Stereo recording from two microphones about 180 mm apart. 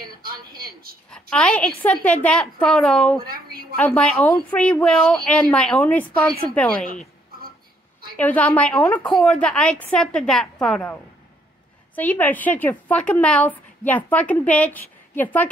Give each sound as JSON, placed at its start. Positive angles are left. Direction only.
{"t": 0.0, "sound": "a sound", "side_deg": -55}
{"t": 1.3, "sound": "a woman's voice", "side_deg": 5}
{"t": 8.2, "sound": "a woman's voice", "side_deg": 10}